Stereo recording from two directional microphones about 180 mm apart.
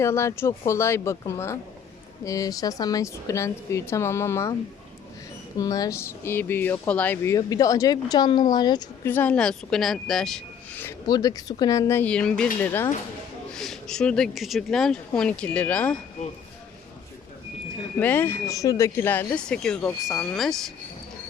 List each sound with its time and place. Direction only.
0.0 s speech: 15° left (ahead or behind)
5.5 s speech: 20° left (ahead or behind)
9.0 s speech: 10° left (ahead or behind)
11.0 s speech: 20° left (ahead or behind)
18.0 s speech: 10° left (ahead or behind)